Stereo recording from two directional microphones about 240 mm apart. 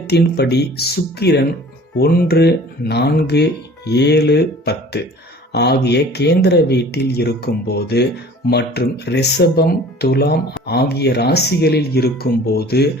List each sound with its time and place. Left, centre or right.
0.1 s speech: left